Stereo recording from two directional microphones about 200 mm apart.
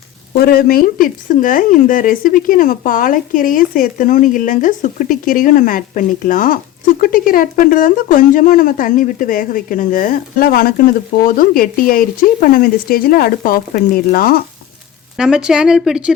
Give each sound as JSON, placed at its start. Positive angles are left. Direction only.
{"t": 0.3, "sound": "speech", "side_deg": 50}
{"t": 15.2, "sound": "speech", "side_deg": -5}